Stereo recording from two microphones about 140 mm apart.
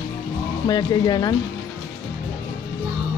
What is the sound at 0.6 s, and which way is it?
Speech, 30° left (ahead or behind).